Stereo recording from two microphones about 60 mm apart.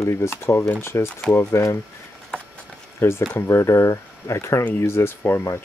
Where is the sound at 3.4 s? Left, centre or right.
Left.